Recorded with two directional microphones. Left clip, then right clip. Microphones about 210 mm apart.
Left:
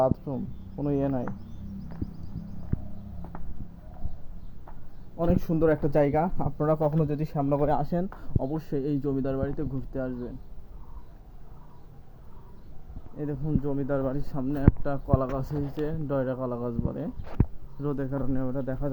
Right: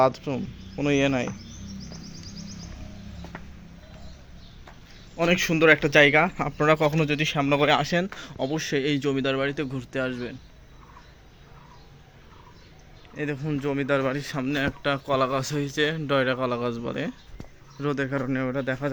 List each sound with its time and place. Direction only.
0.1 s speech: 20° right (ahead or behind)
5.1 s speech: 20° right (ahead or behind)
8.2 s speech: 30° right (ahead or behind)
8.6 s speech: 10° left (ahead or behind)
9.0 s speech: 35° right (ahead or behind)
13.1 s speech: 35° right (ahead or behind)